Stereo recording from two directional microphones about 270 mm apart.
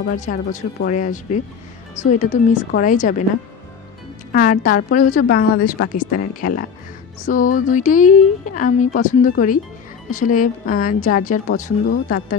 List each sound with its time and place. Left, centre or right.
0.2 s speech: left
4.3 s a woman's voice: left